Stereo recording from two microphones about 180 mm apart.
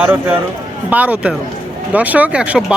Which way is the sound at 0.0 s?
10° right (ahead or behind).